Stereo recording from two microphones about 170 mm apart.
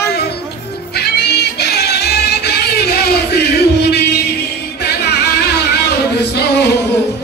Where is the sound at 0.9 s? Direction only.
75° left (ahead or behind).